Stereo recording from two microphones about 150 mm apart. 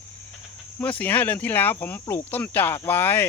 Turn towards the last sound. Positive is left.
turn(degrees=15)  # may be behind; listen again after turning